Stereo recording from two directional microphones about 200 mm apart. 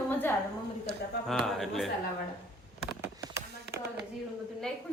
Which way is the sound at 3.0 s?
15° right (ahead or behind).